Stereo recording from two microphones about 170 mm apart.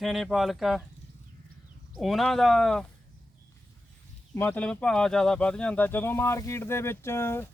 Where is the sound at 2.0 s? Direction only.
Centre (ahead or behind).